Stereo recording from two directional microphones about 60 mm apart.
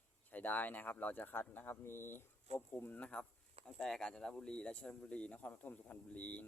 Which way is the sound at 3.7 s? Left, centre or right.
Centre.